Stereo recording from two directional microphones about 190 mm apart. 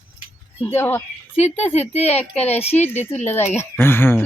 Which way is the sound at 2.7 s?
10° left (ahead or behind).